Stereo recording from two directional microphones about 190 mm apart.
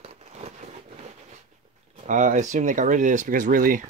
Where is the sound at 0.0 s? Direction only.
35° right (ahead or behind).